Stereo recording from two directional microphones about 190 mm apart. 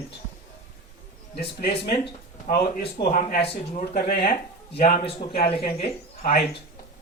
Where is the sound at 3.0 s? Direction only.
45° left (ahead or behind).